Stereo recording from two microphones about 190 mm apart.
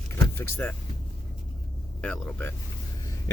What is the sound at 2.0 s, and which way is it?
Speech, 5° left (ahead or behind).